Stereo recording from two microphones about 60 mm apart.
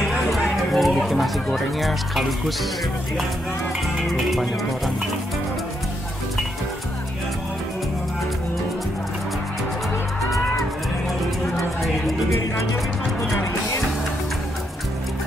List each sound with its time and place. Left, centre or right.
0.7 s speech: centre
4.1 s speech: centre
11.5 s music: centre